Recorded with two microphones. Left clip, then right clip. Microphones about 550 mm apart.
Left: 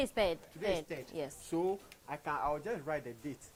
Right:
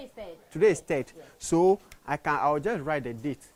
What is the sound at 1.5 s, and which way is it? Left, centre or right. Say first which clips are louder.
Speech: right 15 dB; right.